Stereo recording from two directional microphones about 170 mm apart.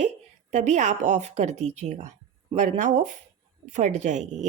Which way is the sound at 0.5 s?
45° right (ahead or behind).